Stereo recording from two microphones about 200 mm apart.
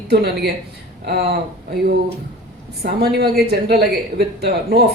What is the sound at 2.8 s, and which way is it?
Speech, 50° right (ahead or behind).